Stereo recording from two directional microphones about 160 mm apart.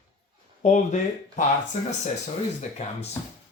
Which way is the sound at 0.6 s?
45° left (ahead or behind).